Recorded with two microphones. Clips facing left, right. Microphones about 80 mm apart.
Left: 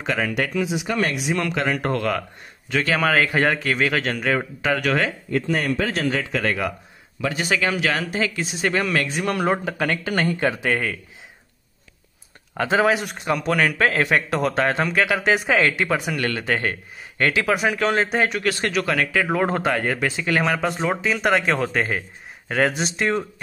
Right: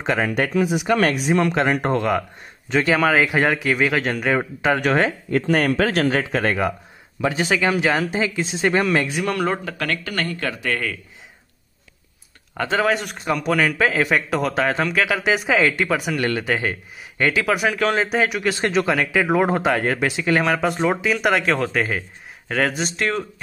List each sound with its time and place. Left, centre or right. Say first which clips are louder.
0.0 s speech: right 3 dB; right
0.3 s speech: right 3 dB; right
1.3 s speech: right 4 dB; right
5.3 s speech: right 4 dB; right
6.1 s speech: right 3 dB; right
7.3 s speech: right 2 dB; centre
9.2 s speech: even; centre
12.5 s a man's voice: left 1 dB; centre
16.2 s speech: right 3 dB; right
16.4 s a man's voice: right 1 dB; centre
18.4 s speech: right 2 dB; right
20.4 s a man's voice: right 2 dB; centre